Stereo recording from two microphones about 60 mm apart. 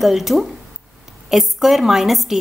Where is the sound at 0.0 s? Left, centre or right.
Centre.